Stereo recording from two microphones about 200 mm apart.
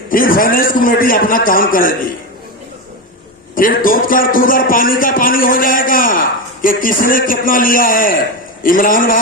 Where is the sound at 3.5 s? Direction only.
45° left (ahead or behind).